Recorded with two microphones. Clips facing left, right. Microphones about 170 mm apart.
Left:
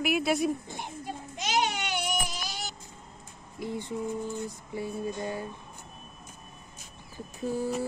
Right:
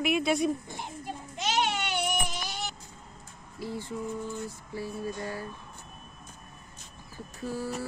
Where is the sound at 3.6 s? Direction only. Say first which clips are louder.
Left 2 dB; 20° left (ahead or behind).